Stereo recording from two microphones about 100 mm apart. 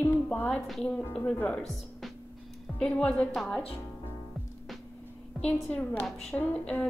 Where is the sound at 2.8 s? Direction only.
10° left (ahead or behind).